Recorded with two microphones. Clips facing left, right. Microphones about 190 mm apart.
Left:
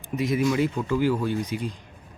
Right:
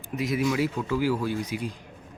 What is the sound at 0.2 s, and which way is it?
Speech, centre (ahead or behind).